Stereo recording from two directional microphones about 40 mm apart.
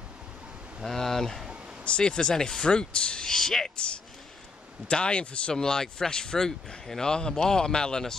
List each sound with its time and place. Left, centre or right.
0.8 s speech: centre
1.9 s speech: left
3.7 s speech: left
5.5 s speech: centre